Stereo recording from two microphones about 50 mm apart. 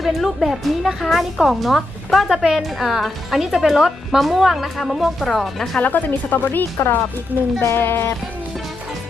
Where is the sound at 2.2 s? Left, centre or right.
Centre.